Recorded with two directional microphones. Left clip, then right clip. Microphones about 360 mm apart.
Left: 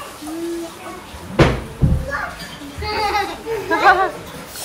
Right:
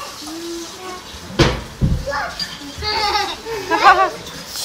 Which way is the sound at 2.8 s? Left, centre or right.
Centre.